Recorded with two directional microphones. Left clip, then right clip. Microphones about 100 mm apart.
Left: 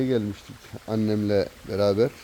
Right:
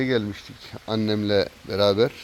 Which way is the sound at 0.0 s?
15° left (ahead or behind).